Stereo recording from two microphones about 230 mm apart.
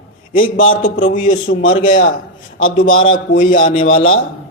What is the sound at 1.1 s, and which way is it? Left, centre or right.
Speech, left.